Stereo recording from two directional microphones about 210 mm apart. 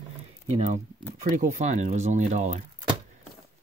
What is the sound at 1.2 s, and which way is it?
Speech, 35° right (ahead or behind).